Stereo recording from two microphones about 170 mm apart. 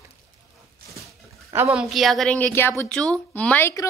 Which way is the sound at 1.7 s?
Centre (ahead or behind).